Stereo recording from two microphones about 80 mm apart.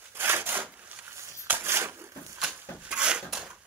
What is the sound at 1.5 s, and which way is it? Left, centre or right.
Crushing, right.